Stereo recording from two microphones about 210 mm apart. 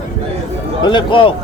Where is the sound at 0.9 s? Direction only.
25° left (ahead or behind).